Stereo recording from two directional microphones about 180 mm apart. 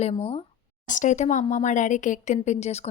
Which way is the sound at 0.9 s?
45° left (ahead or behind).